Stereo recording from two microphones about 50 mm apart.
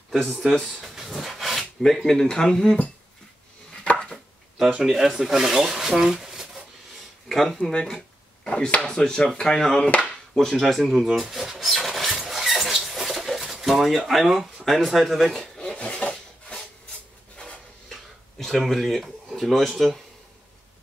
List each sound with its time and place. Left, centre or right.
0.3 s speech: centre
0.6 s a sound: centre
2.0 s speech: centre
3.8 s chopping: left
4.8 s speech: centre
7.2 s speech: centre
8.5 s speech: centre
10.6 s speech: centre
11.1 s filing: centre
12.2 s rodents: centre
13.4 s pigeon: centre
13.7 s speech: centre
15.4 s filing: centre
18.4 s speech: centre